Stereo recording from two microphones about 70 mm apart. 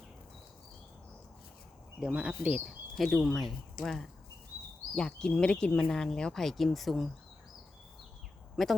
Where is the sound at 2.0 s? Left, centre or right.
Centre.